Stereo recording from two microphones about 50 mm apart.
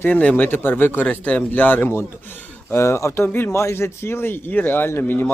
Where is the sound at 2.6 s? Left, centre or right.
Left.